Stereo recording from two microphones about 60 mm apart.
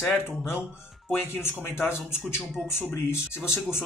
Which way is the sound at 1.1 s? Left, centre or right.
Left.